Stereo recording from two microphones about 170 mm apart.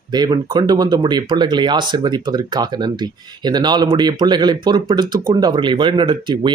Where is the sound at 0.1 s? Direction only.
25° right (ahead or behind).